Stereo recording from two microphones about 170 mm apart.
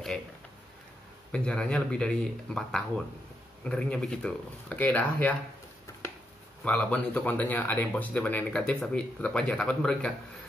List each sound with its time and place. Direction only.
1.3 s speech: 5° left (ahead or behind)
6.6 s speech: 5° left (ahead or behind)